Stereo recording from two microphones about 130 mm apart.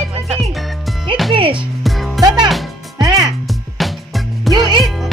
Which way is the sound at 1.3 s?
40° right (ahead or behind).